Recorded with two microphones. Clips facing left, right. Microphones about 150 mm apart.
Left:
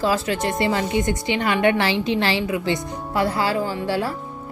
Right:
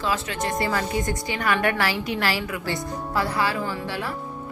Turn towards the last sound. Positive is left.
turn(degrees=30)  # may be behind; listen again after turning